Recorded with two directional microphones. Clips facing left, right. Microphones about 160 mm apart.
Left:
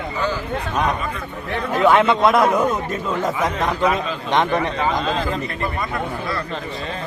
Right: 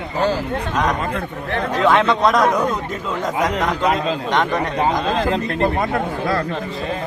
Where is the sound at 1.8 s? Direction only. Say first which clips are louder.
Left 1 dB; 15° left (ahead or behind).